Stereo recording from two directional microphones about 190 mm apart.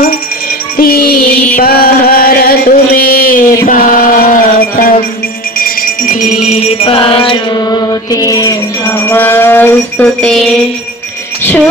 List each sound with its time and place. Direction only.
0.7 s music: 50° left (ahead or behind)
1.6 s chant: 50° left (ahead or behind)
5.6 s music: 50° left (ahead or behind); by 8.5 s 20° left (ahead or behind)
9.0 s a sound: 10° left (ahead or behind)